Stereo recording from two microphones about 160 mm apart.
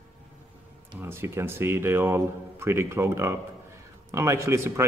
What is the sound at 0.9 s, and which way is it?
Speech, 15° right (ahead or behind).